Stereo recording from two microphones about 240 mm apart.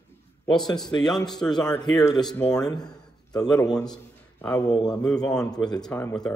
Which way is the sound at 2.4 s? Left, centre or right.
Centre.